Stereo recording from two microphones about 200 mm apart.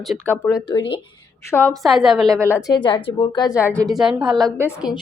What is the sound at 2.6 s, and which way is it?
Speech, 20° left (ahead or behind).